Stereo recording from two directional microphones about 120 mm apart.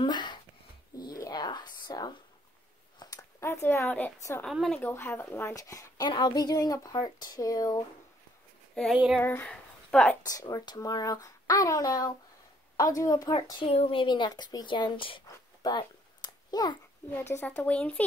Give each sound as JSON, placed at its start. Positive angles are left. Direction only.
{"t": 0.0, "sound": "a sound", "side_deg": 40}
{"t": 3.0, "sound": "speech", "side_deg": 30}
{"t": 4.5, "sound": "speech", "side_deg": 0}
{"t": 4.7, "sound": "a woman's voice", "side_deg": 15}
{"t": 8.9, "sound": "a sound", "side_deg": -10}
{"t": 9.2, "sound": "speech", "side_deg": 15}
{"t": 10.2, "sound": "a woman's voice", "side_deg": 30}
{"t": 13.7, "sound": "a woman's voice", "side_deg": 50}
{"t": 15.6, "sound": "a sound", "side_deg": 35}
{"t": 17.1, "sound": "speech", "side_deg": 20}